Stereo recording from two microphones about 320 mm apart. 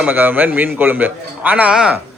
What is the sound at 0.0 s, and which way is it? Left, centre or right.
A man's voice, centre.